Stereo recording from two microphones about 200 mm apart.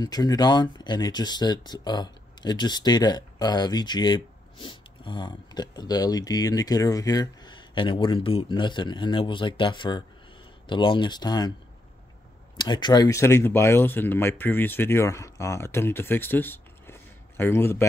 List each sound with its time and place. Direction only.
0.0 s speech: 20° left (ahead or behind)
12.5 s speech: 20° left (ahead or behind)